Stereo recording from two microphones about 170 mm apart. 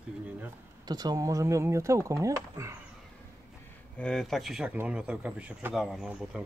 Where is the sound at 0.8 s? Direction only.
25° right (ahead or behind).